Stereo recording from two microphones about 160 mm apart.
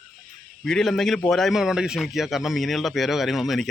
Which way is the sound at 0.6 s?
Centre (ahead or behind).